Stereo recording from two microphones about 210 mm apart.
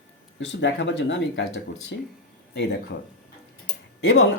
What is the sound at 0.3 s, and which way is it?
Speech, 60° left (ahead or behind).